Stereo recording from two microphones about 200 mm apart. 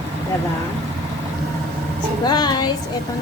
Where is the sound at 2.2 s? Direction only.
20° left (ahead or behind).